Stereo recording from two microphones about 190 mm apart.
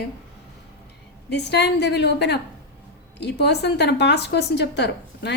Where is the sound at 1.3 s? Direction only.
65° left (ahead or behind).